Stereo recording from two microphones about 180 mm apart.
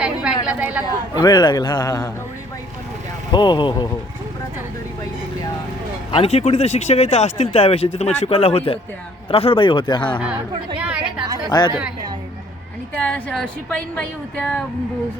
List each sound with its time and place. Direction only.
0.0 s a woman's voice: 5° right (ahead or behind)
1.1 s a man's voice: 25° left (ahead or behind)
3.3 s a man's voice: 25° left (ahead or behind)
6.1 s a man's voice: 30° left (ahead or behind)
10.8 s a woman's voice: 5° right (ahead or behind)
11.4 s a man's voice: 20° left (ahead or behind)
13.0 s a woman's voice: 5° left (ahead or behind)